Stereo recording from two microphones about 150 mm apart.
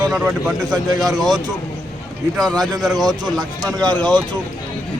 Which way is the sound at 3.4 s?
25° right (ahead or behind).